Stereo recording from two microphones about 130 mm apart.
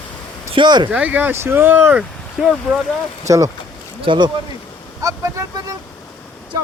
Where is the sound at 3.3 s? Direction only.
25° right (ahead or behind).